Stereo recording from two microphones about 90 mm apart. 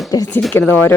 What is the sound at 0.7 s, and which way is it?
Speech, 20° left (ahead or behind).